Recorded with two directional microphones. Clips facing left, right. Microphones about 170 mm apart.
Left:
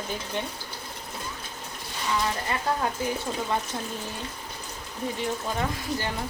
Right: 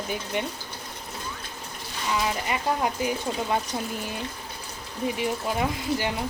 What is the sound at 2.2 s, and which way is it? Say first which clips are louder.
Speech: right 1 dB; 15° right (ahead or behind).